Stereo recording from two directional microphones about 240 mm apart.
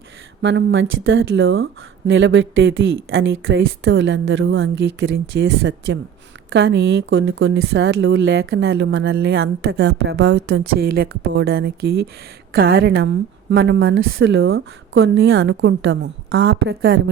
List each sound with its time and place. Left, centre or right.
0.4 s a woman's voice: right